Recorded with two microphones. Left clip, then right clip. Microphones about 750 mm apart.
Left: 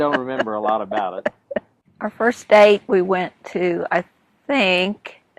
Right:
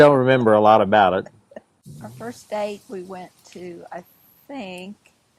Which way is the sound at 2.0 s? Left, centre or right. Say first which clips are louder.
Left 16 dB; left.